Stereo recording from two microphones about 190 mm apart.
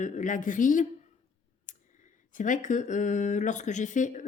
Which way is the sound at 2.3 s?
45° left (ahead or behind).